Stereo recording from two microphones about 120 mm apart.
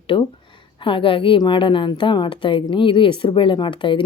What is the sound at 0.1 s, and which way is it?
Speech, 45° left (ahead or behind).